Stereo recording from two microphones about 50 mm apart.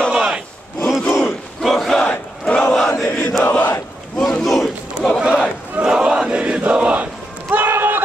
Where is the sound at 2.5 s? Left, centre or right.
Left.